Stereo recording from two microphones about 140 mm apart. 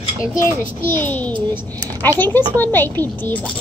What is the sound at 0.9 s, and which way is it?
Speech, 15° left (ahead or behind).